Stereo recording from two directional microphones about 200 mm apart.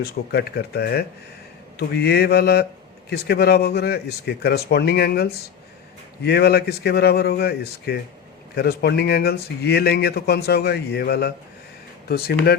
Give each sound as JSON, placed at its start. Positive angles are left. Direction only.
{"t": 0.0, "sound": "speech", "side_deg": 55}